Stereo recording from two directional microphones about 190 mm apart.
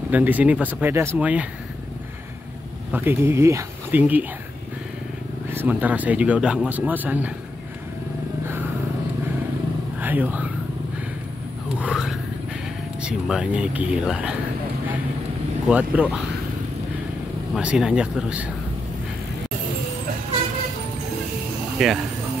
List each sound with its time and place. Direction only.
0.1 s speech: 10° right (ahead or behind)
2.9 s speech: 10° right (ahead or behind)
5.5 s speech: 10° right (ahead or behind)
9.9 s speech: 10° right (ahead or behind)
11.8 s a sound: 5° right (ahead or behind)
13.0 s speech: 5° right (ahead or behind)
15.7 s speech: 5° right (ahead or behind)
17.6 s speech: 5° right (ahead or behind)
21.7 s speech: centre (ahead or behind)